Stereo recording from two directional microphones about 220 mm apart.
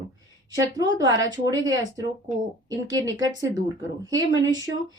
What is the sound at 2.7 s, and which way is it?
Speech, 15° right (ahead or behind).